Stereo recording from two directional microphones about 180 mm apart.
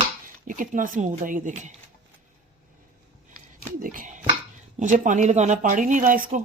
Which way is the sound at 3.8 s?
45° right (ahead or behind).